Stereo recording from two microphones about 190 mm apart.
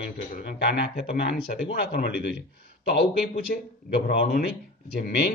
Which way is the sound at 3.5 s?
50° left (ahead or behind).